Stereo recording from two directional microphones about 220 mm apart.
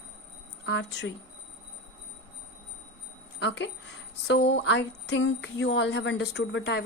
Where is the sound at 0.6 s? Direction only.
50° left (ahead or behind).